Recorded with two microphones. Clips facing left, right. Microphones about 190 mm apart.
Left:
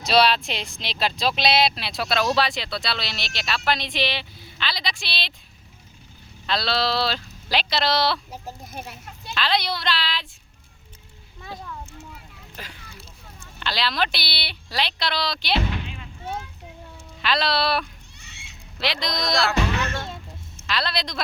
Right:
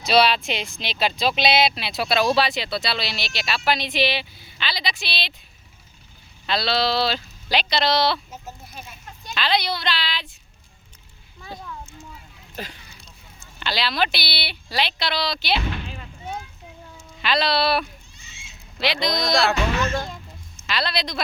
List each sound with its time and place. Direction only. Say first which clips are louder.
0.0 s speech: right 1 dB; centre (ahead or behind)
6.4 s speech: right 2 dB; centre (ahead or behind)
8.3 s speech: left 2 dB; 35° left (ahead or behind)
8.7 s a child's voice: left 5 dB; 50° left (ahead or behind)
9.3 s speech: right 1 dB; centre (ahead or behind)
13.6 s speech: right 1 dB; centre (ahead or behind)
17.2 s speech: right 2 dB; centre (ahead or behind)
18.2 s goat: left 1 dB; 65° left (ahead or behind)
18.8 s speech: right 4 dB; centre (ahead or behind)
20.7 s speech: right 1 dB; centre (ahead or behind)